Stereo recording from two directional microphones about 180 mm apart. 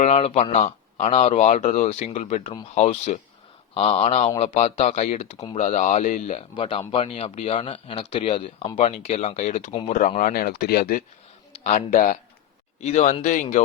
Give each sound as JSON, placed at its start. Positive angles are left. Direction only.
{"t": 0.0, "sound": "speech", "side_deg": 35}
{"t": 6.5, "sound": "speech", "side_deg": 30}
{"t": 11.6, "sound": "speech", "side_deg": 45}